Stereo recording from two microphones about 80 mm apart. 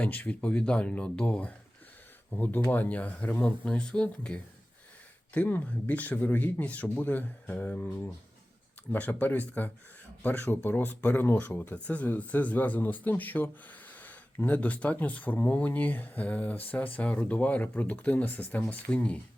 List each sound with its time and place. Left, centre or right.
0.0 s speech: left